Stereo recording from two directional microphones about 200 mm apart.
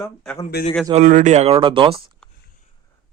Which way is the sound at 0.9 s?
40° right (ahead or behind).